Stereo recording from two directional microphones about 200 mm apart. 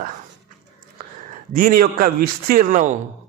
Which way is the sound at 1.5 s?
45° right (ahead or behind).